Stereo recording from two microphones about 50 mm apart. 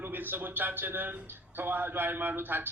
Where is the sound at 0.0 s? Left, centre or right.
Right.